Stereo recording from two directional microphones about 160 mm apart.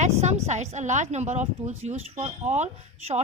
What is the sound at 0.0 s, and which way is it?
Speech, 45° right (ahead or behind).